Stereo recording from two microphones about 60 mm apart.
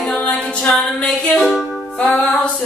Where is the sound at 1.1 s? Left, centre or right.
Centre.